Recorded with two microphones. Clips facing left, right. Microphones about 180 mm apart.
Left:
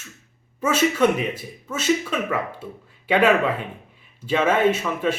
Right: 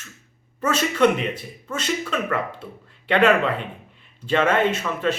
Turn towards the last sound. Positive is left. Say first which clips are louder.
# left 2 dB
turn(degrees=10)  # may be behind; listen again after turning